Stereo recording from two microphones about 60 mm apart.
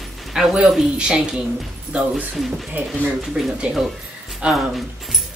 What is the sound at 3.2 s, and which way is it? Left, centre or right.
A woman's voice, centre.